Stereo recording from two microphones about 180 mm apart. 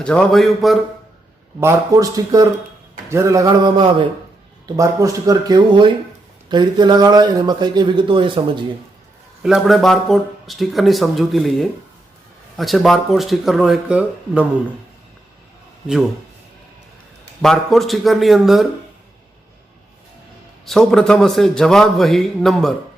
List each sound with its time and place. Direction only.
0.0 s speech: 5° left (ahead or behind)
1.6 s speech: 20° right (ahead or behind)
3.1 s a sound: 15° right (ahead or behind)
4.6 s speech: 20° right (ahead or behind)
9.4 s speech: centre (ahead or behind)
17.4 s speech: centre (ahead or behind)
20.7 s speech: 5° left (ahead or behind)